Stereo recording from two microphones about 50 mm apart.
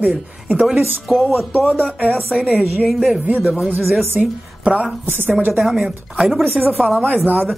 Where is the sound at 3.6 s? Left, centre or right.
Right.